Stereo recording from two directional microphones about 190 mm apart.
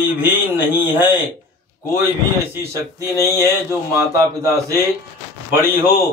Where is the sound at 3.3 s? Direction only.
15° right (ahead or behind).